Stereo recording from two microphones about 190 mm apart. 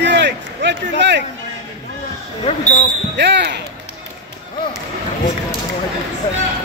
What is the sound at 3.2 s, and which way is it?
Speech, 65° right (ahead or behind).